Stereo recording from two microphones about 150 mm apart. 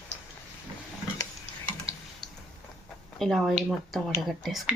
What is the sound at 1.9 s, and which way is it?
Tick-tock, 40° right (ahead or behind).